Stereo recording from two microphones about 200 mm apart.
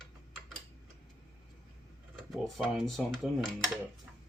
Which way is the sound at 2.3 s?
Centre (ahead or behind).